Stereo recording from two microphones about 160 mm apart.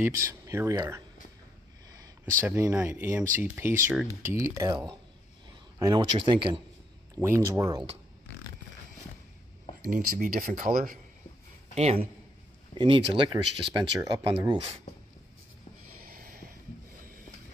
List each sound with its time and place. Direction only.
0.2 s speech: 20° right (ahead or behind)
2.4 s speech: 10° right (ahead or behind)
5.8 s speech: 25° right (ahead or behind)
7.2 s speech: 15° right (ahead or behind)
9.8 s speech: 60° right (ahead or behind)
11.7 s a man's voice: 40° right (ahead or behind)
16.0 s a sound: 65° right (ahead or behind)